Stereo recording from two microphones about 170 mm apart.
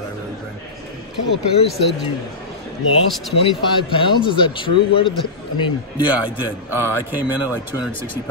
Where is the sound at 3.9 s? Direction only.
30° left (ahead or behind).